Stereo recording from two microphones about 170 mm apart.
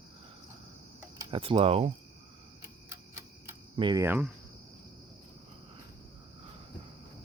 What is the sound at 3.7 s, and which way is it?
Speech, 25° right (ahead or behind).